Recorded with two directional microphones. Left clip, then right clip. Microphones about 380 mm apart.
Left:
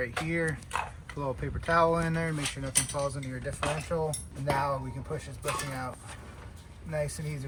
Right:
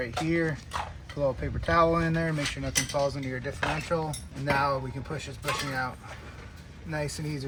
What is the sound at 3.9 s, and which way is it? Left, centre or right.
Speech, right.